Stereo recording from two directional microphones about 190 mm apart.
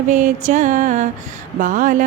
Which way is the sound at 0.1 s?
40° right (ahead or behind).